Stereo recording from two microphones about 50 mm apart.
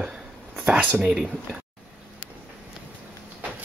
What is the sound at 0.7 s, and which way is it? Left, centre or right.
Speech, right.